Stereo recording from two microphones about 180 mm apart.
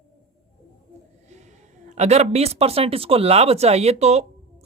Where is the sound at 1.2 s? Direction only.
40° right (ahead or behind).